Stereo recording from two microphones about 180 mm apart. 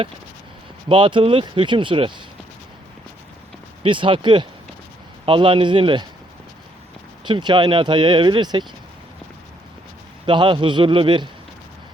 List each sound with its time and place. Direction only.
0.9 s speech: 25° right (ahead or behind)
3.8 s speech: 30° right (ahead or behind)
7.3 s speech: 25° right (ahead or behind)
10.2 s speech: 30° right (ahead or behind)